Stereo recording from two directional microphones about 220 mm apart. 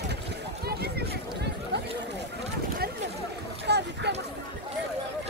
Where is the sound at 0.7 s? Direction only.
45° right (ahead or behind).